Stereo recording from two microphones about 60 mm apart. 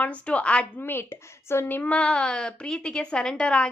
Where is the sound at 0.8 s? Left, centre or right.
Left.